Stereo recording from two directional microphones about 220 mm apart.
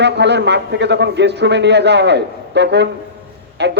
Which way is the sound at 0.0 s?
50° right (ahead or behind).